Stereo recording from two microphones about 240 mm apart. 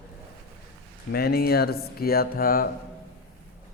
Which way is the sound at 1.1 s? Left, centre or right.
Left.